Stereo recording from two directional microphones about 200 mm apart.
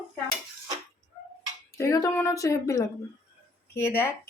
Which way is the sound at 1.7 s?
15° left (ahead or behind).